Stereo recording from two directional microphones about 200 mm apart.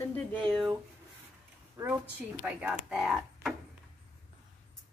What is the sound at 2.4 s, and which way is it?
Speech, 5° right (ahead or behind).